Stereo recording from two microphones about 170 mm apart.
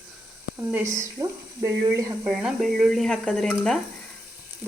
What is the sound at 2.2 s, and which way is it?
Speech, 5° right (ahead or behind).